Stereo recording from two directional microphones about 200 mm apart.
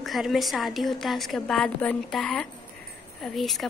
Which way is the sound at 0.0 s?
Centre (ahead or behind).